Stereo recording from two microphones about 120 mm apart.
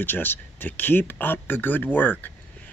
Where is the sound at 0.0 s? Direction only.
15° left (ahead or behind).